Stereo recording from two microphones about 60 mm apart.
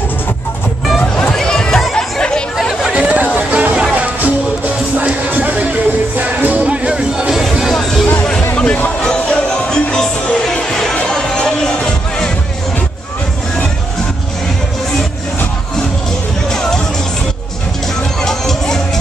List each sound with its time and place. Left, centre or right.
1.1 s chatter: centre
2.9 s chatter: right
3.3 s hubbub: right
3.9 s music: right; by 7.7 s centre
7.7 s music: centre
16.4 s music: centre
18.2 s music: centre